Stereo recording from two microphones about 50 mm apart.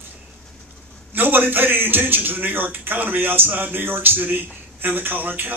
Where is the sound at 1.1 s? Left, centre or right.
Right.